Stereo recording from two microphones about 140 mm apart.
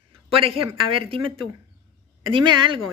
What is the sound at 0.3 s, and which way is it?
A woman's voice, 40° right (ahead or behind).